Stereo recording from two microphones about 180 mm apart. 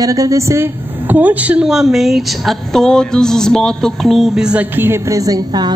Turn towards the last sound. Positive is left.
turn(degrees=-20)  # may be behind; listen again after turning